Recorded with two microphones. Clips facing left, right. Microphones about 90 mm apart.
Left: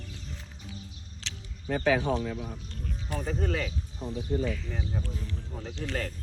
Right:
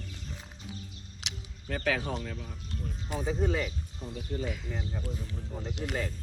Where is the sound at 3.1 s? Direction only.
5° right (ahead or behind).